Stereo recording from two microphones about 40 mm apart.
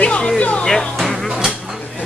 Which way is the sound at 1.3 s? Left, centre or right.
Centre.